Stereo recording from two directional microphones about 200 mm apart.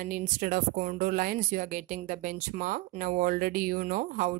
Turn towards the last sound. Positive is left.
turn(degrees=-40)  # may be behind; listen again after turning